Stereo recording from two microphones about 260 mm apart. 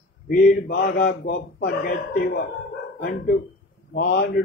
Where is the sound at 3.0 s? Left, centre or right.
Left.